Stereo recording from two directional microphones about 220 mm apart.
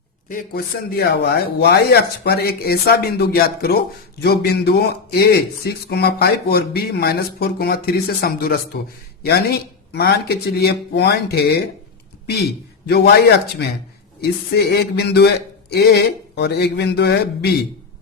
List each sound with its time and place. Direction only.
0.3 s speech: 40° left (ahead or behind)
12.9 s speech: 45° left (ahead or behind)